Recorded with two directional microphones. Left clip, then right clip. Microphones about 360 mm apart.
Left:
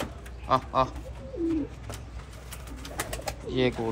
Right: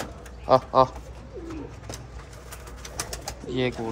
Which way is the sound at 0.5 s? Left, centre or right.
Centre.